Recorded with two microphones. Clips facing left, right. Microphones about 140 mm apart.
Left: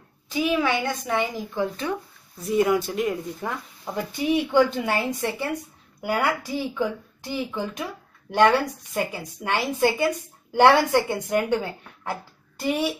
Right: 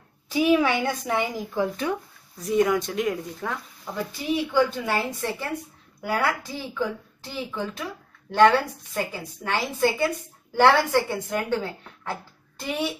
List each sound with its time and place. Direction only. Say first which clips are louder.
0.3 s a woman's voice: right 3 dB; 10° right (ahead or behind)
2.4 s speech: left 1 dB; 5° left (ahead or behind)
3.9 s a woman's voice: left 3 dB; 20° left (ahead or behind)